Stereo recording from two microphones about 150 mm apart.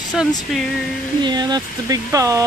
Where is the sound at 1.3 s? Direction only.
25° right (ahead or behind).